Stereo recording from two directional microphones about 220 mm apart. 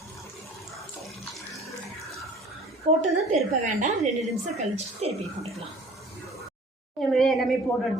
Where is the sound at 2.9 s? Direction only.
35° right (ahead or behind).